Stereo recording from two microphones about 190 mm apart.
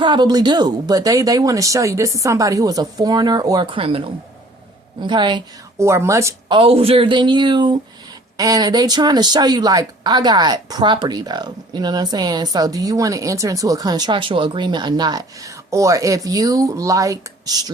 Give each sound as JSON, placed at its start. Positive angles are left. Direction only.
{"t": 0.0, "sound": "a woman's voice", "side_deg": -25}
{"t": 6.6, "sound": "speech", "side_deg": -30}